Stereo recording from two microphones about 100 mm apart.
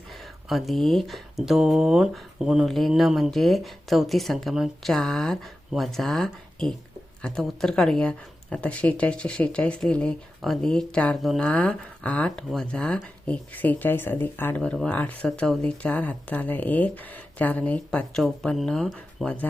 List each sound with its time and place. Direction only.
0.1 s speech: centre (ahead or behind)
11.2 s speech: centre (ahead or behind)
11.4 s speech: 10° left (ahead or behind)